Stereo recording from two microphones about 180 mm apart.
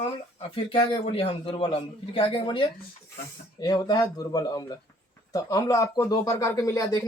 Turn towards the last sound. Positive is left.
turn(degrees=20)  # may be behind; listen again after turning